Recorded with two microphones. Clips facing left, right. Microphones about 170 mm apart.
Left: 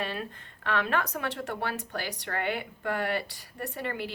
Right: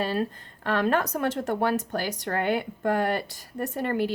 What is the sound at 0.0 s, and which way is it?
Speech, 35° right (ahead or behind).